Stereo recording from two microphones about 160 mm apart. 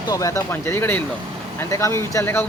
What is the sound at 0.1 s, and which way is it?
Speech, 20° left (ahead or behind).